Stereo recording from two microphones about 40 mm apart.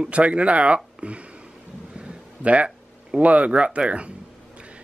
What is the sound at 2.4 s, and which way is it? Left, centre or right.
Speech, right.